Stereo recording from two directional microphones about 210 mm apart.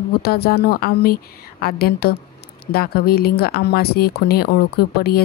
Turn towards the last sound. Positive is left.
turn(degrees=50)  # may be behind; listen again after turning